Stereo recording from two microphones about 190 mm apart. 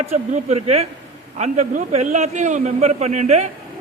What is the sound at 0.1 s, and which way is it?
A man's voice, 35° right (ahead or behind).